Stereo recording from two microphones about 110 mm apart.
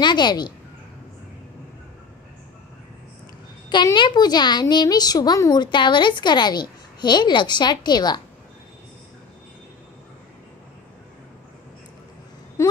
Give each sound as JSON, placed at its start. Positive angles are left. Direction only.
{"t": 0.0, "sound": "a woman's voice", "side_deg": 40}
{"t": 3.7, "sound": "a woman's voice", "side_deg": 45}